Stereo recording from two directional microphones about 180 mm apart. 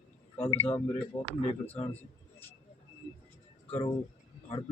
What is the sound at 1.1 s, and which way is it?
Speech, 30° left (ahead or behind).